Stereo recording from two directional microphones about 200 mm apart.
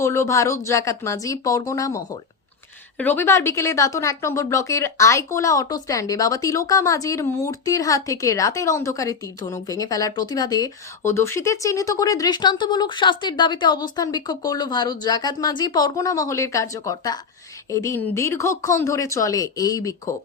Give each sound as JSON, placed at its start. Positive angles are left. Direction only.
{"t": 0.0, "sound": "speech", "side_deg": 15}
{"t": 3.0, "sound": "speech", "side_deg": 10}